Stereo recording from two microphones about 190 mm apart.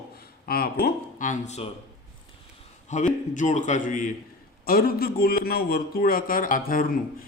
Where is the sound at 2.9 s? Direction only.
40° left (ahead or behind).